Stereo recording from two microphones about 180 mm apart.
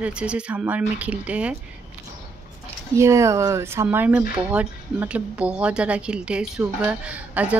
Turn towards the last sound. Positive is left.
turn(degrees=-5)  # may be behind; listen again after turning